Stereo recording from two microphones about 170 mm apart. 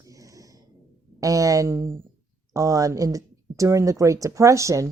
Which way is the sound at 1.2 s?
20° right (ahead or behind).